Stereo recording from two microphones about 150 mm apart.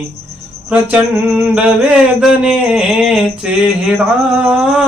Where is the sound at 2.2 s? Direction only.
5° right (ahead or behind).